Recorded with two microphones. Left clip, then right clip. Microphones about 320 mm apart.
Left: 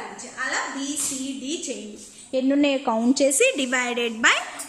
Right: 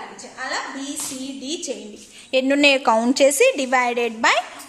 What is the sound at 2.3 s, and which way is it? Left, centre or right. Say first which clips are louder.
Speech: right 5 dB; right.